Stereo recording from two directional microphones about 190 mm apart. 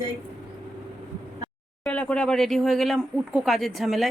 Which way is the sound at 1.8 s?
5° left (ahead or behind).